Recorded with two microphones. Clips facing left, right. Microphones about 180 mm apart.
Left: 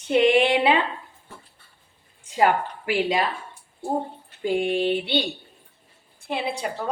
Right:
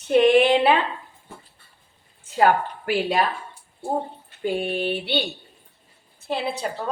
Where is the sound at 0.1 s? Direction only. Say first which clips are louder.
Right 2 dB; 15° left (ahead or behind).